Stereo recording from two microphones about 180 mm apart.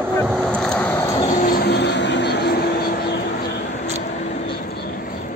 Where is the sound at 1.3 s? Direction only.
50° left (ahead or behind).